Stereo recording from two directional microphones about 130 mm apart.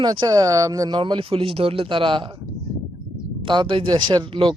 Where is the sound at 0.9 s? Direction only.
40° right (ahead or behind).